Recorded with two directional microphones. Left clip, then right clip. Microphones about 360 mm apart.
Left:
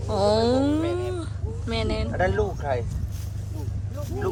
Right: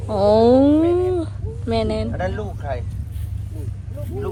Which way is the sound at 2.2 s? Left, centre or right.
Left.